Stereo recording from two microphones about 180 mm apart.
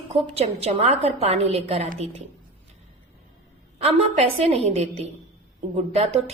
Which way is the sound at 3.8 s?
35° right (ahead or behind).